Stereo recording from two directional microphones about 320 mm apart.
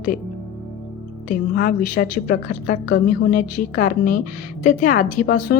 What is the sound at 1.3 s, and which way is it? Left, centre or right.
Speech, left.